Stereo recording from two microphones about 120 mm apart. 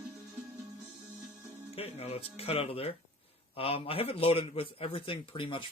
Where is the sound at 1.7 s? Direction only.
55° left (ahead or behind).